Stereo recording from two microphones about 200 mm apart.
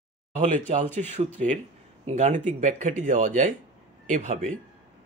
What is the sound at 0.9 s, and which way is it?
Speech, 40° right (ahead or behind).